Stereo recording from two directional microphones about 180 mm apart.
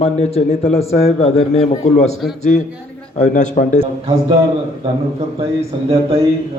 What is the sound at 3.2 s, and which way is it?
Speech, 40° left (ahead or behind).